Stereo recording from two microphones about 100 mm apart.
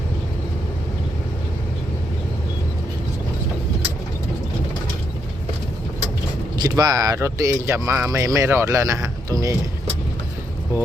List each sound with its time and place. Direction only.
6.6 s speech: 40° right (ahead or behind)